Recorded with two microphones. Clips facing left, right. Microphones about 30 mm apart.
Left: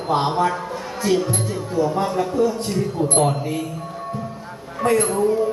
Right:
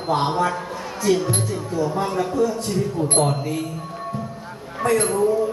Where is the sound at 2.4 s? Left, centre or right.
Left.